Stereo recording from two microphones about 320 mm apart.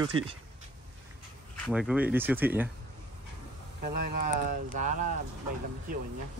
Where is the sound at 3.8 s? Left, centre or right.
Right.